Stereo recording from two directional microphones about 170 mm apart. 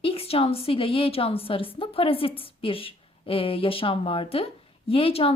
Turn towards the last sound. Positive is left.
turn(degrees=35)  # may be behind; listen again after turning